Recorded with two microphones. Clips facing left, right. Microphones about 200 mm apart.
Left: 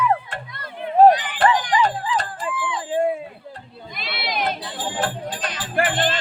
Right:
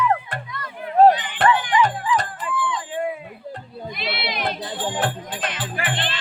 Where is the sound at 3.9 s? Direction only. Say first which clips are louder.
Right 1 dB; 50° left (ahead or behind).